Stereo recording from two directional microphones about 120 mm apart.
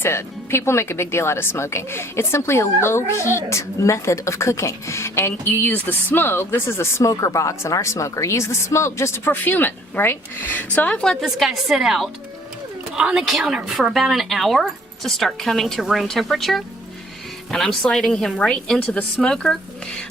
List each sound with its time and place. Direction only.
0.0 s a woman's voice: 20° left (ahead or behind); by 19.5 s 5° left (ahead or behind)